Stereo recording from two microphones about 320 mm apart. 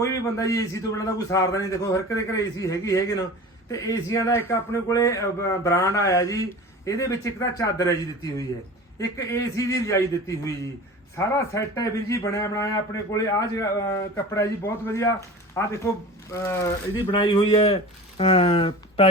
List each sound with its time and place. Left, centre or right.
0.0 s a man's voice: centre